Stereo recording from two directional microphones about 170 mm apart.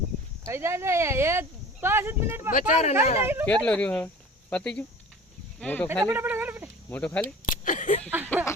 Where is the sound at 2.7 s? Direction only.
40° left (ahead or behind).